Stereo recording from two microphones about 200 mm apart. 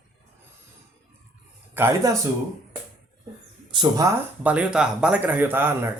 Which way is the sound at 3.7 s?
20° right (ahead or behind).